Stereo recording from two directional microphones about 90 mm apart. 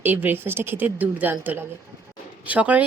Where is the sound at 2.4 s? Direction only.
15° right (ahead or behind).